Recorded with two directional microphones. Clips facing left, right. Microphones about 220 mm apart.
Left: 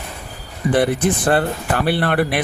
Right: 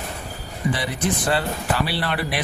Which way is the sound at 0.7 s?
55° left (ahead or behind).